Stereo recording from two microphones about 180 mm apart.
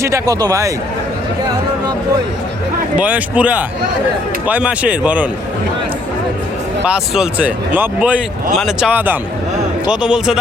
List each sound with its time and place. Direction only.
0.0 s speech: 20° right (ahead or behind)
3.0 s speech: 10° right (ahead or behind)
6.8 s a man's voice: 5° right (ahead or behind)